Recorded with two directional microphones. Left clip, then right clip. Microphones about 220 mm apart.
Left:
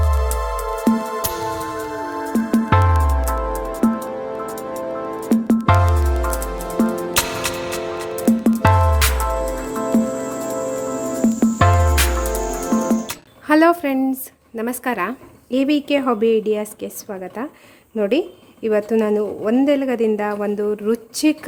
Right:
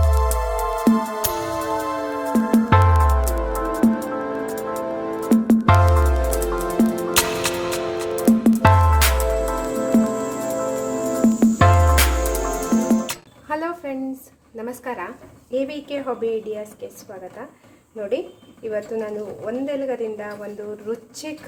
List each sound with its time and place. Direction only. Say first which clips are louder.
0.0 s music: right 1 dB; centre (ahead or behind)
2.2 s music: right 1 dB; centre (ahead or behind)
13.5 s a sound: left 12 dB; 45° left (ahead or behind)
14.5 s a woman's voice: left 6 dB; 40° left (ahead or behind)
17.9 s a woman's voice: left 6 dB; 50° left (ahead or behind)